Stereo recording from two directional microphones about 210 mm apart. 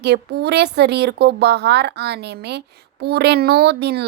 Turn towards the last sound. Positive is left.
turn(degrees=-50)  # may be behind; listen again after turning